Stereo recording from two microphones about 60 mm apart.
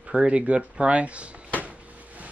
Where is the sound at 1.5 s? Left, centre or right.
Right.